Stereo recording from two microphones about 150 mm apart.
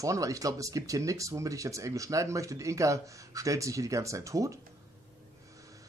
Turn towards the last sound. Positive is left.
turn(degrees=-20)  # may be behind; listen again after turning